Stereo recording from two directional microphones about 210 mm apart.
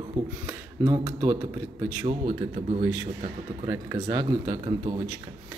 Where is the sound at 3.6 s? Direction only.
20° right (ahead or behind).